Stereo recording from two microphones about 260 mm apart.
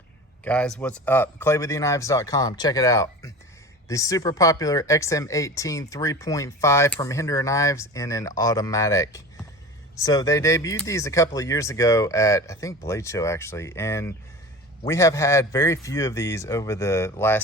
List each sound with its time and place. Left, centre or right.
0.4 s speech: centre